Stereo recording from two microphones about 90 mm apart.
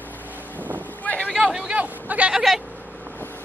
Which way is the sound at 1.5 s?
15° right (ahead or behind).